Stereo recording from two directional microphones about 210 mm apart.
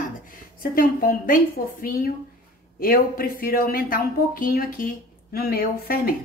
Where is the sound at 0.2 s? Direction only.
40° left (ahead or behind).